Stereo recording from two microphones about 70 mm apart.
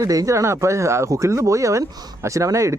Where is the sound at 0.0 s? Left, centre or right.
Right.